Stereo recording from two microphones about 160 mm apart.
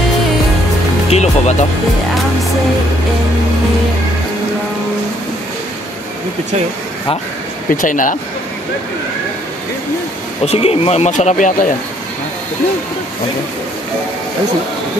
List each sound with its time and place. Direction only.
1.1 s speech: 45° left (ahead or behind)
7.7 s speech: 55° left (ahead or behind)
10.4 s speech: 40° left (ahead or behind)